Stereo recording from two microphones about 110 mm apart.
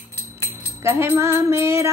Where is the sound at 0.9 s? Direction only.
25° right (ahead or behind).